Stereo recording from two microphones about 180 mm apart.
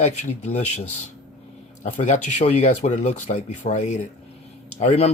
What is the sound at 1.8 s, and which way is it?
Speech, 40° left (ahead or behind).